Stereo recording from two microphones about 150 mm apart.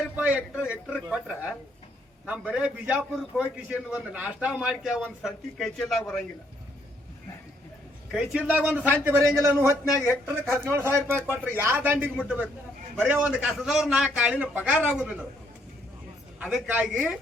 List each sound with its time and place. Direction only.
0.2 s a man's voice: 10° right (ahead or behind)
8.1 s a man's voice: 5° right (ahead or behind)
9.6 s speech: 25° left (ahead or behind)
10.6 s a man's voice: 15° right (ahead or behind)
16.4 s a man's voice: centre (ahead or behind)